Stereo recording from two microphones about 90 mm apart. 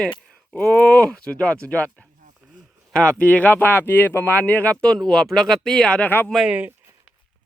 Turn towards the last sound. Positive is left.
turn(degrees=-20)  # may be behind; listen again after turning